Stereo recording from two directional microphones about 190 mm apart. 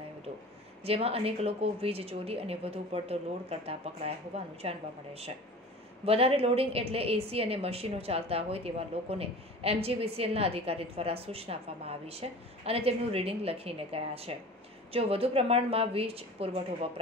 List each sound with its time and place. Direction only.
0.8 s a woman's voice: 30° right (ahead or behind)